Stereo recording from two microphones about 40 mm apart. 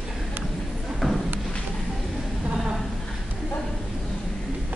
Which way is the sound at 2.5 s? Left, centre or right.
Centre.